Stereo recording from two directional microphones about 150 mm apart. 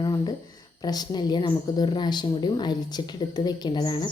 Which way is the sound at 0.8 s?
25° left (ahead or behind).